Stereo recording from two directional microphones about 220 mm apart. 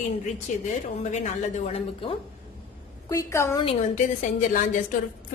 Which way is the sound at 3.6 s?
35° left (ahead or behind).